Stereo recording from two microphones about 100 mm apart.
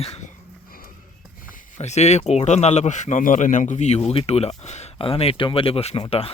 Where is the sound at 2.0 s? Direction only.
90° left.